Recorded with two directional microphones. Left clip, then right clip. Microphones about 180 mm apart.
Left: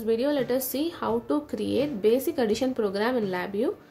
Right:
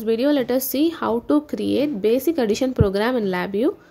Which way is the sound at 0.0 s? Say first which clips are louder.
Right 5 dB; 40° right (ahead or behind).